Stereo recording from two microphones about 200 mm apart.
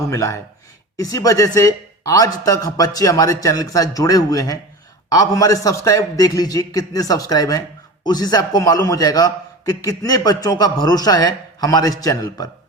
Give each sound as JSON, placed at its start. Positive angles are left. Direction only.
{"t": 0.1, "sound": "a man's voice", "side_deg": 15}